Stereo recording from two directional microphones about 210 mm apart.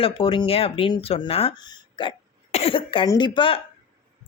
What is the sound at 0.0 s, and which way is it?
A man's voice, 25° left (ahead or behind).